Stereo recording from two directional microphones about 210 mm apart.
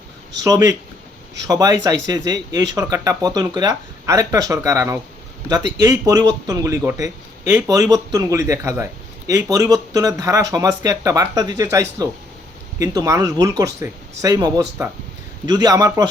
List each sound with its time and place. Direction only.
0.4 s speech: 15° right (ahead or behind)